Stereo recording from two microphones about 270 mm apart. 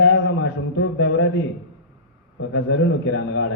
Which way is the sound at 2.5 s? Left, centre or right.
Left.